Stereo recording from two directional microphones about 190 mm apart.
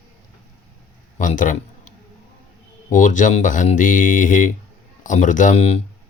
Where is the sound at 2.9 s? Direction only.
40° left (ahead or behind).